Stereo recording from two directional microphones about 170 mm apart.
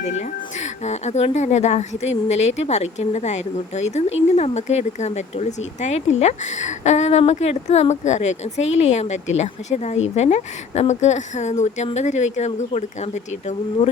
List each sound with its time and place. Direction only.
0.0 s speech: 40° left (ahead or behind)